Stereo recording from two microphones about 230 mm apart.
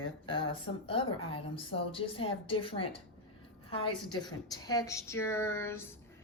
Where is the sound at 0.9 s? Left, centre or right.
Left.